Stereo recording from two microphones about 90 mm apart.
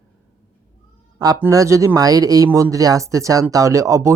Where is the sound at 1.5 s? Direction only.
35° right (ahead or behind).